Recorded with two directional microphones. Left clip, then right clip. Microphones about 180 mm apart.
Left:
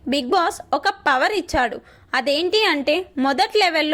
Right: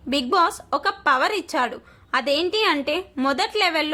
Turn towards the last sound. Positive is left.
turn(degrees=20)  # may be behind; listen again after turning